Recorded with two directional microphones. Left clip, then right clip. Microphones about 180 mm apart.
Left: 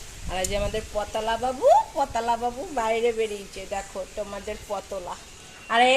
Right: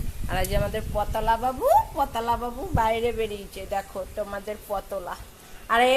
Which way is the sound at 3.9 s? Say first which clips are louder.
Right 1 dB; 10° right (ahead or behind).